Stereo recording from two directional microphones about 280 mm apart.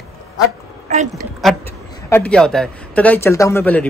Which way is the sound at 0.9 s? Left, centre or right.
Right.